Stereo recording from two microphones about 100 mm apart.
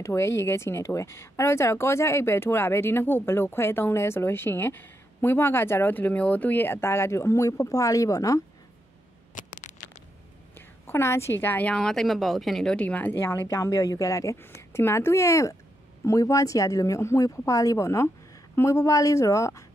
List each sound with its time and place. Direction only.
0.0 s speech: 25° left (ahead or behind)
10.9 s speech: 25° left (ahead or behind)